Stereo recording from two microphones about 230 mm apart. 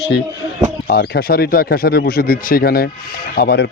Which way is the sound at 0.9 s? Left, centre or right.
Left.